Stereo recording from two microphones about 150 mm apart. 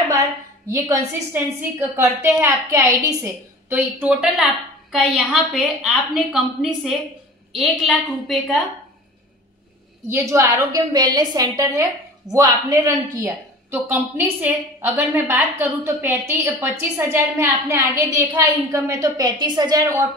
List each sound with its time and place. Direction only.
0.7 s a woman's voice: 20° right (ahead or behind); by 8.4 s centre (ahead or behind)
10.0 s a woman's voice: 20° right (ahead or behind)
13.2 s a woman's voice: 15° right (ahead or behind)